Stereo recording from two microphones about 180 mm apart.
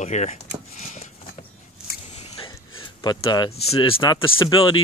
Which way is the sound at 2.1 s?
30° left (ahead or behind).